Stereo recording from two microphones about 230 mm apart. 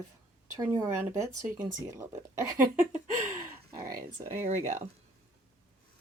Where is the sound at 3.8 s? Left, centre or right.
Centre.